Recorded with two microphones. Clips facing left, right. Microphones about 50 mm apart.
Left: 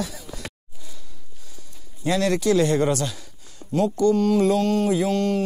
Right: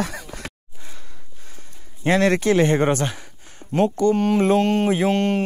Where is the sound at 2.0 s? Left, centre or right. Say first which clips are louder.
Right 4 dB; right.